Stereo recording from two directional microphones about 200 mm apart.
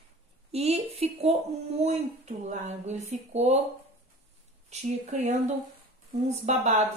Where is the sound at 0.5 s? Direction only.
30° right (ahead or behind).